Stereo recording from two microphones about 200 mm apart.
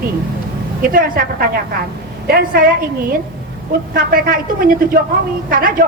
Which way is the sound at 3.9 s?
45° right (ahead or behind).